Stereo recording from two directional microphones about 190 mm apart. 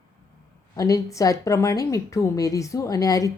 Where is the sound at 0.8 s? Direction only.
15° left (ahead or behind).